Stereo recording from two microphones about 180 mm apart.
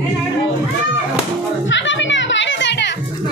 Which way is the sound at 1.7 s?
90° left.